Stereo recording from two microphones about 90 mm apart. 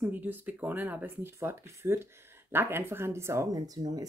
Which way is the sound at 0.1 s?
20° right (ahead or behind).